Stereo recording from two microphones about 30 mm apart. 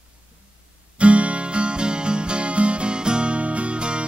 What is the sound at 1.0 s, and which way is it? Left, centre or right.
Music, right.